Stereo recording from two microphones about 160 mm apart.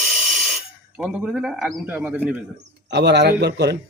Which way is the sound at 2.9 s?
90° right.